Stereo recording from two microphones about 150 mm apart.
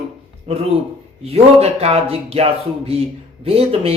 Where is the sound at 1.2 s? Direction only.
45° right (ahead or behind).